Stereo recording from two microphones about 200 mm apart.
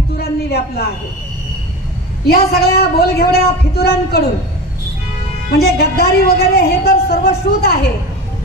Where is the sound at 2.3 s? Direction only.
50° left (ahead or behind).